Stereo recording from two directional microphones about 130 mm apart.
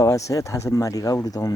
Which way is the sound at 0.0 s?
25° left (ahead or behind).